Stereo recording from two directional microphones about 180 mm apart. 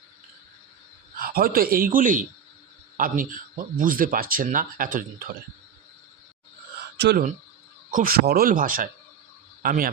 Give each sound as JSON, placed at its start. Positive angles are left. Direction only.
{"t": 1.1, "sound": "a man's voice", "side_deg": -55}
{"t": 7.0, "sound": "speech", "side_deg": -70}
{"t": 7.9, "sound": "speech", "side_deg": -50}